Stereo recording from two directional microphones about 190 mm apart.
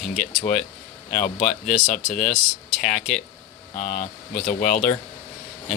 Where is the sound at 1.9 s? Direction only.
40° left (ahead or behind).